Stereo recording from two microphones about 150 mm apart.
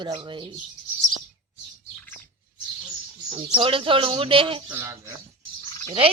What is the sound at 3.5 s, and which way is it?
Speech, 35° right (ahead or behind).